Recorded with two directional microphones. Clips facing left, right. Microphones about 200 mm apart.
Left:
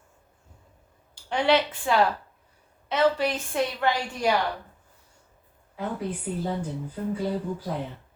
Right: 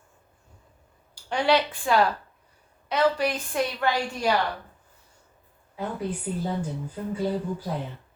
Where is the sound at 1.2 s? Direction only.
20° left (ahead or behind).